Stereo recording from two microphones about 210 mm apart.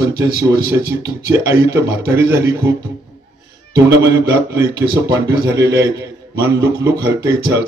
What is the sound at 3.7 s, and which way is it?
Speech, 15° right (ahead or behind).